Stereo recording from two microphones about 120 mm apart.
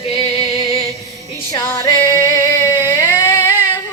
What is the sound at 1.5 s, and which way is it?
Music, 25° left (ahead or behind).